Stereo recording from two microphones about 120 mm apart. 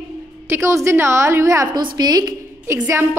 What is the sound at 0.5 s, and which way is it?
A woman's voice, 25° right (ahead or behind).